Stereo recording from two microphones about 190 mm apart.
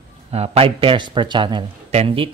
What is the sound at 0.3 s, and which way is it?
Speech, 30° right (ahead or behind).